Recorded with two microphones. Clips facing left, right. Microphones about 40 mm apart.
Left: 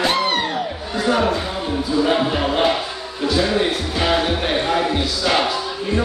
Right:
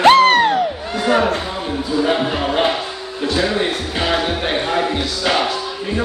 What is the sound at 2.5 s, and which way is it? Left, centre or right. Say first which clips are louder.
Music: right 1 dB; centre.